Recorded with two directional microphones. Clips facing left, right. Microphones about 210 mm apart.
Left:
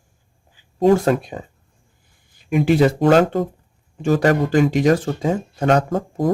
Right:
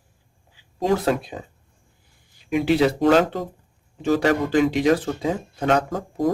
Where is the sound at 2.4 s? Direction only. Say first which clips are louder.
Left 3 dB; 50° left (ahead or behind).